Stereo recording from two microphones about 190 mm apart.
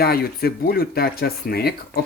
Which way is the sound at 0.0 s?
55° left (ahead or behind).